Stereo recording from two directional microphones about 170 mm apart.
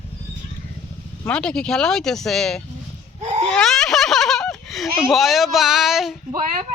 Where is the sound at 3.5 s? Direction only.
5° left (ahead or behind).